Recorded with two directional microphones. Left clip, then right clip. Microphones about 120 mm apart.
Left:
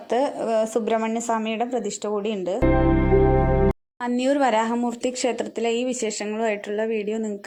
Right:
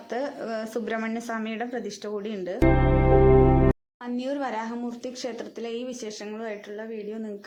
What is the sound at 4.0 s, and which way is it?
Speech, 80° left.